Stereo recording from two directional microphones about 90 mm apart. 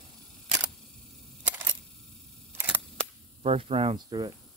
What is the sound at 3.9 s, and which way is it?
Speech, 50° right (ahead or behind).